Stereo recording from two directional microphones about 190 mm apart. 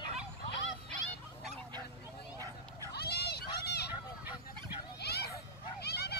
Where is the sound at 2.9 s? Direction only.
55° left (ahead or behind).